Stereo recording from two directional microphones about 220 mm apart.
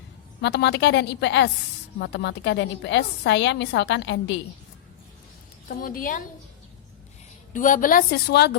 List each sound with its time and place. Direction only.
0.4 s a woman's voice: 50° left (ahead or behind)
5.6 s a woman's voice: 40° left (ahead or behind)
7.5 s a woman's voice: 35° left (ahead or behind)